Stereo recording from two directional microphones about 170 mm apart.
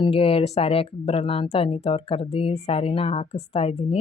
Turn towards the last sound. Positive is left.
turn(degrees=40)  # may be behind; listen again after turning